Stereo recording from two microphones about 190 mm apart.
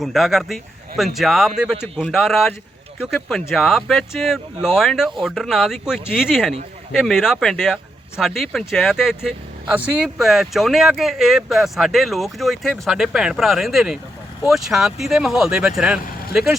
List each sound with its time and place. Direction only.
0.0 s speech: centre (ahead or behind)